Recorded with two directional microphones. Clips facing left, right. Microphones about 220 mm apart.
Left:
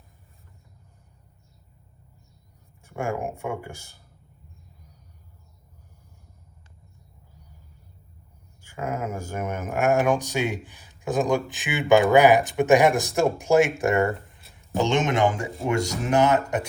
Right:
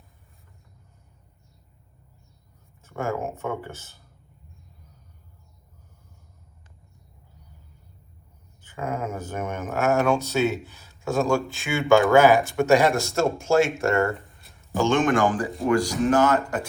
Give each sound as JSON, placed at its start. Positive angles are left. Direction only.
{"t": 2.8, "sound": "speech", "side_deg": 15}
{"t": 8.6, "sound": "speech", "side_deg": 10}